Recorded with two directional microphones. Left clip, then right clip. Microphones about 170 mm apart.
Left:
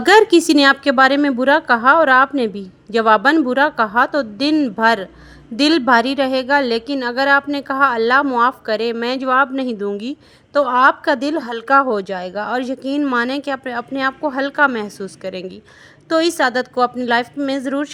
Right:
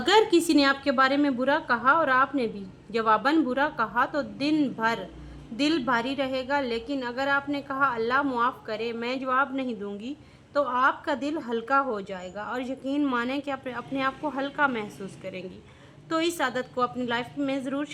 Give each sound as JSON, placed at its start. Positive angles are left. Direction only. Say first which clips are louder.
{"t": 0.0, "sound": "a woman's voice", "louder": "left 10 dB", "side_deg": 40}